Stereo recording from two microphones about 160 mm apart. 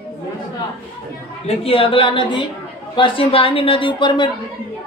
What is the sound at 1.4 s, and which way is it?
A woman's voice, 40° left (ahead or behind).